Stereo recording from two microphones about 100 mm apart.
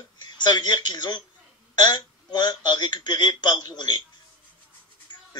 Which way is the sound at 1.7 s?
45° left (ahead or behind).